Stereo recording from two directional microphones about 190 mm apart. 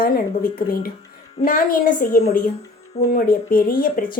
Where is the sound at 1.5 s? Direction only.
45° left (ahead or behind).